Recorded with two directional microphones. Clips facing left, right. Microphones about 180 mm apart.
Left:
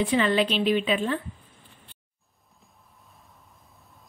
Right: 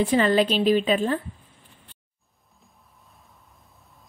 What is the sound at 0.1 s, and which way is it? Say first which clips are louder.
Speech: right 3 dB; 40° right (ahead or behind).